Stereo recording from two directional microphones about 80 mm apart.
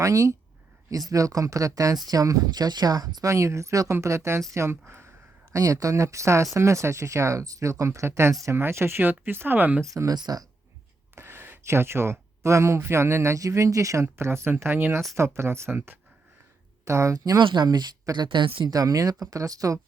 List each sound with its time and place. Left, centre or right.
0.0 s speech: right
3.3 s speech: right
5.5 s speech: right
8.5 s speech: right
9.8 s speech: right
10.2 s speech: right
11.1 s speech: right
17.4 s speech: right
18.7 s speech: right